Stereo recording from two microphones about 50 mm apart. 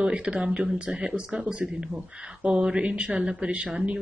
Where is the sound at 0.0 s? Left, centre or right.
Right.